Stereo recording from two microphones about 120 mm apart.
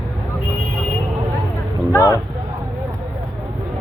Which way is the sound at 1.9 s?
25° left (ahead or behind).